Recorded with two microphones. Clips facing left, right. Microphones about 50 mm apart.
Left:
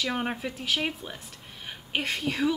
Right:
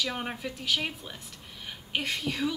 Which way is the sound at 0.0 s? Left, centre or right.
Centre.